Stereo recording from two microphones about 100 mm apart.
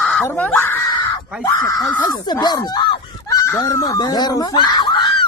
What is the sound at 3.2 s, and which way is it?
Fowl, 30° left (ahead or behind).